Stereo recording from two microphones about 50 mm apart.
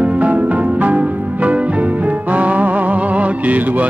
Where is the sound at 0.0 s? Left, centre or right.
Right.